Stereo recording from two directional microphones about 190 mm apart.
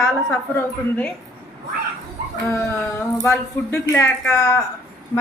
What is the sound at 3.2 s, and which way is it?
Speech, 15° left (ahead or behind).